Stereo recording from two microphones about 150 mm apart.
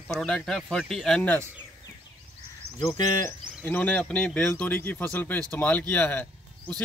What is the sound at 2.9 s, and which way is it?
Speech, 15° left (ahead or behind).